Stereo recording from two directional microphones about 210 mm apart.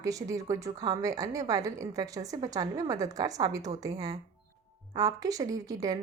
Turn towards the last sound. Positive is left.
turn(degrees=-15)  # may be behind; listen again after turning